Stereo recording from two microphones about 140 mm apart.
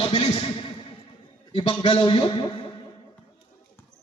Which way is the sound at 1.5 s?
40° left (ahead or behind).